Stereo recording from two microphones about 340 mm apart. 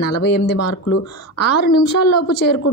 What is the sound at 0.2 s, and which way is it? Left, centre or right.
Speech, left.